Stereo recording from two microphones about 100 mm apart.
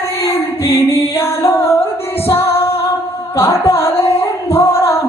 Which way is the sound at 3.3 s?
25° left (ahead or behind).